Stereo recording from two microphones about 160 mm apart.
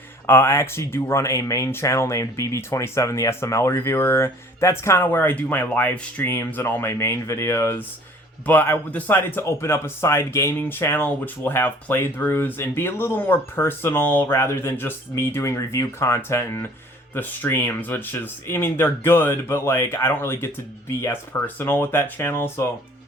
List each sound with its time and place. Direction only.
0.3 s speech: 15° left (ahead or behind)